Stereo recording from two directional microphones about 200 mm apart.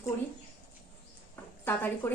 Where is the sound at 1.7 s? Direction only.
10° left (ahead or behind).